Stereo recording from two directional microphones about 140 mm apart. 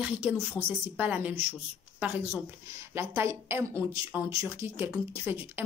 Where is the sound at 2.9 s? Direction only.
20° right (ahead or behind).